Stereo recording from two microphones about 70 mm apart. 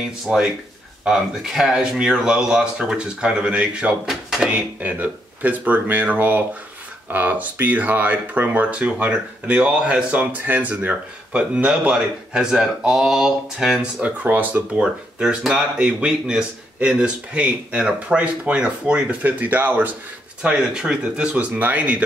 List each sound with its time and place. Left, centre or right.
0.3 s speech: centre
4.5 s speech: right; by 13.7 s centre
14.0 s speech: right
20.4 s speech: centre